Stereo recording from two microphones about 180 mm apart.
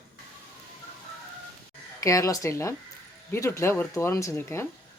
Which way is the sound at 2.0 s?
20° left (ahead or behind).